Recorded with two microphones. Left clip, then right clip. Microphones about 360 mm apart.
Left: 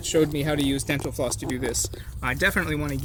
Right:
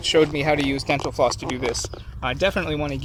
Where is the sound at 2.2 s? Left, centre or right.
Centre.